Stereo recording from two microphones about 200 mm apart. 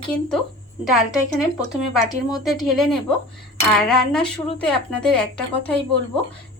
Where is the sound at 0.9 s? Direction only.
Centre (ahead or behind).